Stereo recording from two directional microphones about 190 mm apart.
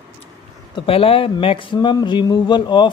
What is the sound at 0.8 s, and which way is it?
Speech, 30° left (ahead or behind).